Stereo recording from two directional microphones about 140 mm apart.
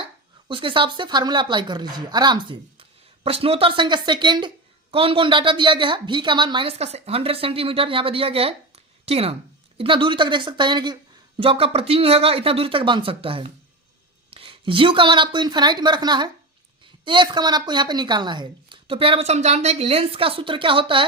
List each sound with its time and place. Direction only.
0.0 s speech: 35° right (ahead or behind)